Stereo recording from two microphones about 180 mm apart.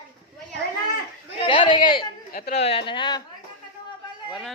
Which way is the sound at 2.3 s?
40° left (ahead or behind).